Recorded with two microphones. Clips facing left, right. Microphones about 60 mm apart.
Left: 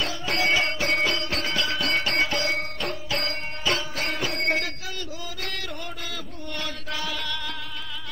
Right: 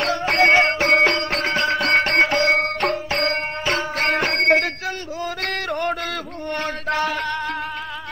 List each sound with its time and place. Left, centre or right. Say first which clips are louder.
0.0 s music: right 8 dB; right
6.5 s chant: right 10 dB; right